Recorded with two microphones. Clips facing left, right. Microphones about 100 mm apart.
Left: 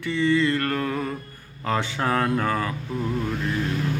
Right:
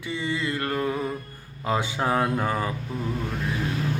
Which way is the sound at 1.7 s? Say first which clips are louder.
Even; 20° right (ahead or behind).